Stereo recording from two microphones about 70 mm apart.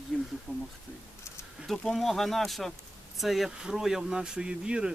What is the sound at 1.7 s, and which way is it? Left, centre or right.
Speech, centre.